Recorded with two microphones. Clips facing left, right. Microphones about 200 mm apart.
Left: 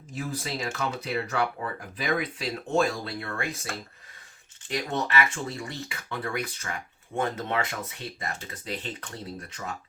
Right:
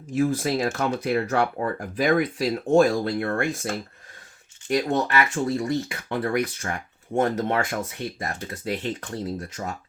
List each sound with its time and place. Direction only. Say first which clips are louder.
0.2 s speech: right 10 dB; 55° right (ahead or behind)
4.7 s speech: right 6 dB; 55° right (ahead or behind)